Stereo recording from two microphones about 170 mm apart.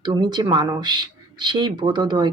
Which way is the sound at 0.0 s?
25° right (ahead or behind).